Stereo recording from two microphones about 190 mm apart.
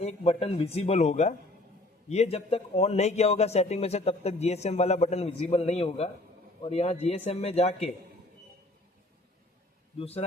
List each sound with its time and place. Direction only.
0.0 s speech: 35° left (ahead or behind)
10.0 s speech: 30° left (ahead or behind)